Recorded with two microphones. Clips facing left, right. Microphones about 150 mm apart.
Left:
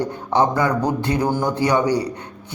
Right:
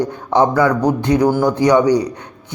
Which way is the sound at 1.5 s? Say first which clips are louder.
Right 5 dB; 15° right (ahead or behind).